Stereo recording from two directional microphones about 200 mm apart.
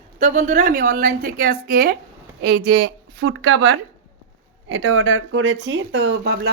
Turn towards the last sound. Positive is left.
turn(degrees=-60)  # may be behind; listen again after turning